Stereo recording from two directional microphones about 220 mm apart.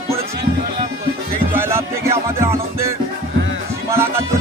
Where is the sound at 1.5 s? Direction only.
10° right (ahead or behind).